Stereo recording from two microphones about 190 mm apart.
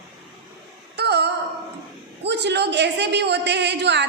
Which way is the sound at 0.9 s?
60° right (ahead or behind).